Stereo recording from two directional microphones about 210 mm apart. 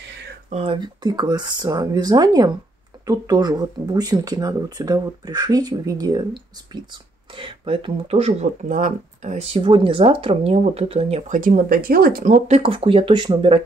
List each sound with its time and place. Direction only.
0.5 s speech: 25° right (ahead or behind)